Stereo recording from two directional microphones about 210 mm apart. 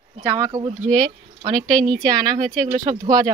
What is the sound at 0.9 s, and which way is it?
Speech, 5° left (ahead or behind).